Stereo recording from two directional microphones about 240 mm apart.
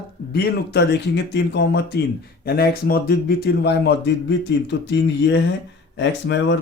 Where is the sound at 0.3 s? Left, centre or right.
Left.